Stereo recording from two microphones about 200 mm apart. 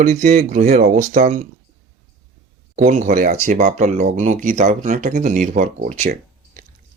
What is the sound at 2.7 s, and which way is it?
Speech, 40° right (ahead or behind).